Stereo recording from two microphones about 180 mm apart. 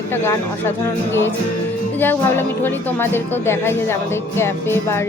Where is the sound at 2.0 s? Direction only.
10° left (ahead or behind).